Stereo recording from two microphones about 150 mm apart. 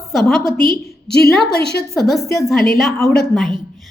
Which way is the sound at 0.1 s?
Centre (ahead or behind).